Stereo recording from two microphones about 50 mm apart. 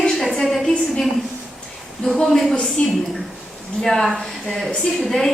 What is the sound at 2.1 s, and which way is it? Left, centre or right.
Speech, centre.